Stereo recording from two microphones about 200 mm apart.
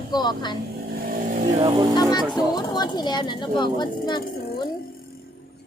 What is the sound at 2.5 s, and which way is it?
A woman's voice, 20° left (ahead or behind).